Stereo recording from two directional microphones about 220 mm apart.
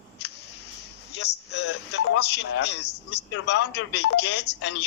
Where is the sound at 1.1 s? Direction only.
50° left (ahead or behind).